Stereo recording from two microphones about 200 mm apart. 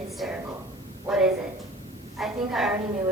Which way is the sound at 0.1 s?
Centre (ahead or behind).